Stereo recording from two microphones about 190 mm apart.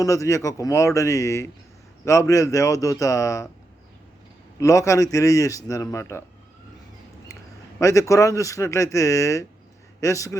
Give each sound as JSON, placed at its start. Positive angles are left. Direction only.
{"t": 0.0, "sound": "a man's voice", "side_deg": 15}
{"t": 4.6, "sound": "a man's voice", "side_deg": 15}
{"t": 7.8, "sound": "a man's voice", "side_deg": 15}